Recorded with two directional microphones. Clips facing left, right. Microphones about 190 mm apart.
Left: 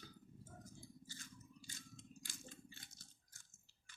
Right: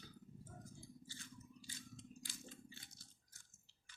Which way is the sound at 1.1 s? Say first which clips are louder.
Right 2 dB; 45° left (ahead or behind).